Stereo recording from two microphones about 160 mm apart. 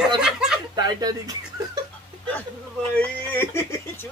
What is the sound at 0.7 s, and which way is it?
Speech, 25° right (ahead or behind).